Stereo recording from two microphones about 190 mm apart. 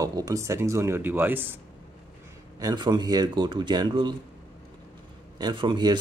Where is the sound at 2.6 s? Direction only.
20° right (ahead or behind).